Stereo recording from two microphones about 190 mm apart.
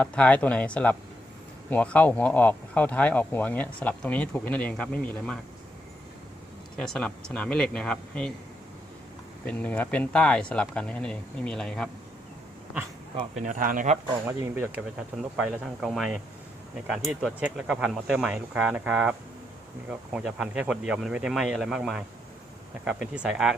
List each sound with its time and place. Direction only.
0.0 s speech: 5° left (ahead or behind)
6.7 s speech: 5° left (ahead or behind)
9.5 s speech: 5° left (ahead or behind)
13.4 s speech: 45° right (ahead or behind)
14.3 s speech: 10° right (ahead or behind)